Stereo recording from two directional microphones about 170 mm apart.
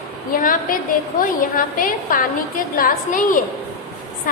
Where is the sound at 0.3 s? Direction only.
55° left (ahead or behind).